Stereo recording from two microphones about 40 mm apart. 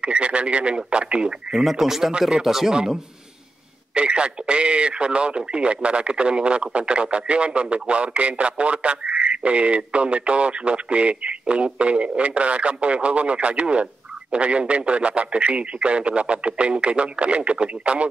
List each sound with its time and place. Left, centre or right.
0.0 s a man's voice: right
1.5 s a man's voice: centre
2.7 s a man's voice: centre